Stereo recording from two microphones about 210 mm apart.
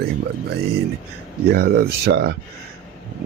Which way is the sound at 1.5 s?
50° right (ahead or behind).